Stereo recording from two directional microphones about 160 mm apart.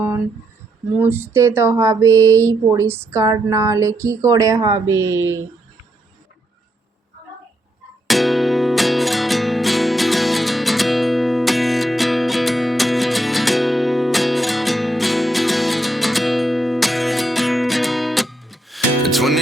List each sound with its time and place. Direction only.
0.9 s speech: 15° right (ahead or behind)
8.0 s music: centre (ahead or behind)